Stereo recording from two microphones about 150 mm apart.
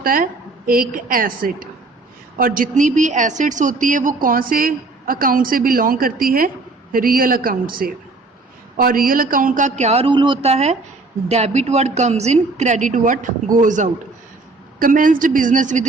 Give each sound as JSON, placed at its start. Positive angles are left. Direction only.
{"t": 0.0, "sound": "a woman's voice", "side_deg": -70}